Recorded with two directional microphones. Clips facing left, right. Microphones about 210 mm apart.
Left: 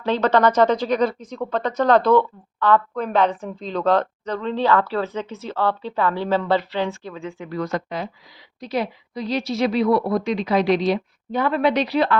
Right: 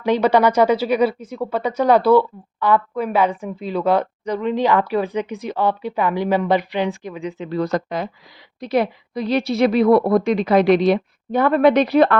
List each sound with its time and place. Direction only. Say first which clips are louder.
0.0 s speech: right 2 dB; 10° right (ahead or behind)
7.6 s speech: right 4 dB; 45° right (ahead or behind)
8.6 s a woman's voice: right 5 dB; 60° right (ahead or behind)